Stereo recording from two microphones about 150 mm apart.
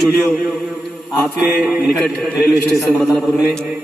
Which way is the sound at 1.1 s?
5° right (ahead or behind).